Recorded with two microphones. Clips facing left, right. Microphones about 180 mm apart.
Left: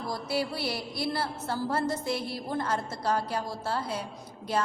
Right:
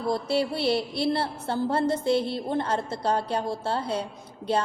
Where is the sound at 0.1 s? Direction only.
25° right (ahead or behind).